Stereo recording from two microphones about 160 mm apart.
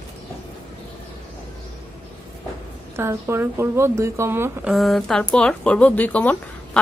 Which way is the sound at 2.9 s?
15° right (ahead or behind).